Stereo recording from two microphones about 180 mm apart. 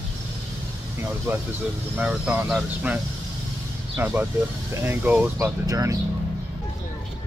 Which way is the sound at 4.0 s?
10° right (ahead or behind).